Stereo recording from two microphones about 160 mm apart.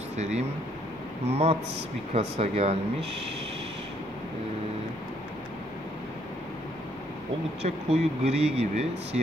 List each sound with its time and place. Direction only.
0.2 s speech: 45° right (ahead or behind)
7.6 s speech: 40° right (ahead or behind)